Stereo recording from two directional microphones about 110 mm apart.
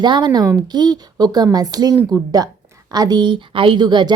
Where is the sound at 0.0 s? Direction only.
45° right (ahead or behind).